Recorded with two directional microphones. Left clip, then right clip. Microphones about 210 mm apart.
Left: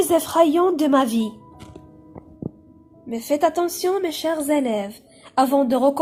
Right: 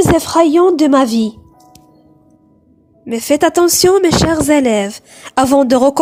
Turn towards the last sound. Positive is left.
turn(degrees=-50)  # may be behind; listen again after turning